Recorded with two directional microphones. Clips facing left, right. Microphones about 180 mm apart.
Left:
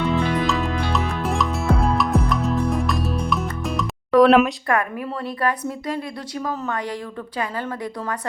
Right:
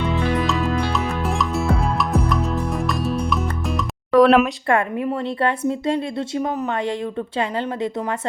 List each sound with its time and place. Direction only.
0.0 s music: centre (ahead or behind)
4.7 s a woman's voice: 25° right (ahead or behind)